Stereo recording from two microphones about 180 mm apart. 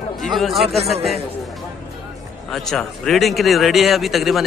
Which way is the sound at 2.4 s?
Centre (ahead or behind).